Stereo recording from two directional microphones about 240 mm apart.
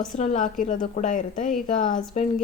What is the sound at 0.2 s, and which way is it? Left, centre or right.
A woman's voice, left.